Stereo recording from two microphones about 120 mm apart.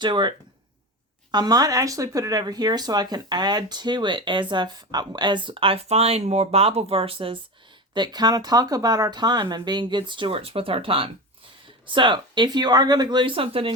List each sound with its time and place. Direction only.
0.0 s speech: 40° right (ahead or behind)
7.9 s speech: 35° right (ahead or behind)